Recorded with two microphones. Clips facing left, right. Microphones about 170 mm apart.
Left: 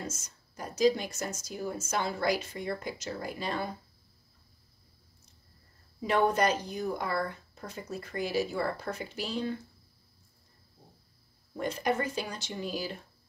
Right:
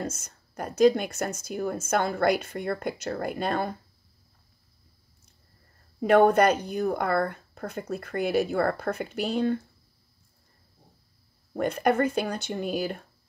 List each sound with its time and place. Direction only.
0.0 s speech: 60° right (ahead or behind)
5.9 s speech: 55° right (ahead or behind)
11.5 s speech: 60° right (ahead or behind)